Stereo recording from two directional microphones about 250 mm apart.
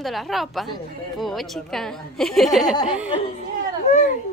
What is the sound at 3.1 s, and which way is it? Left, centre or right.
Speech, left.